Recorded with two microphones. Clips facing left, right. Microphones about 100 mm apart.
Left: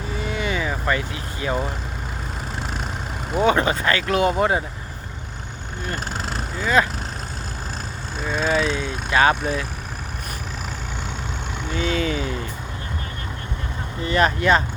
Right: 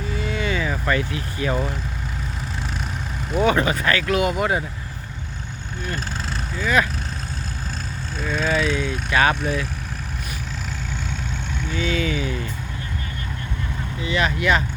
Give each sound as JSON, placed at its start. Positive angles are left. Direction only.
{"t": 0.2, "sound": "vehicle", "side_deg": 20}
{"t": 3.3, "sound": "speech", "side_deg": 25}
{"t": 6.6, "sound": "speech", "side_deg": 25}
{"t": 8.2, "sound": "speech", "side_deg": 20}
{"t": 11.7, "sound": "speech", "side_deg": 40}
{"t": 14.0, "sound": "speech", "side_deg": 40}